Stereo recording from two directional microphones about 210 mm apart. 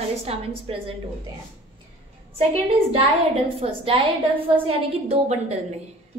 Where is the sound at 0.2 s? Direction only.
30° right (ahead or behind).